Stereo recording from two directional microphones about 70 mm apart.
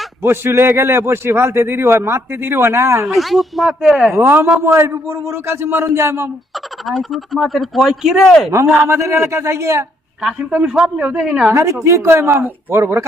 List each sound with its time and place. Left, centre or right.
0.2 s a man's voice: right
3.1 s speech: centre
4.1 s a man's voice: right
6.8 s speech: centre
8.9 s a man's voice: right
10.5 s a man's voice: centre
11.5 s a man's voice: right